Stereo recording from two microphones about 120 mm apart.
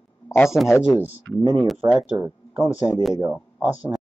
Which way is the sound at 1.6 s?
Centre (ahead or behind).